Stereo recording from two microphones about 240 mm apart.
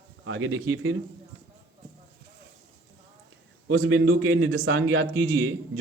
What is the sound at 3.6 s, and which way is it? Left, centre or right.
A man's voice, right.